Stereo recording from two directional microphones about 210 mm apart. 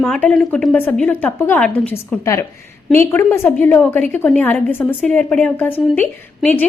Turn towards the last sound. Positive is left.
turn(degrees=10)  # may be behind; listen again after turning